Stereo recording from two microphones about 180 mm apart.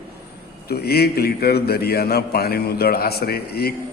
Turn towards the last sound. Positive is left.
turn(degrees=60)  # may be behind; listen again after turning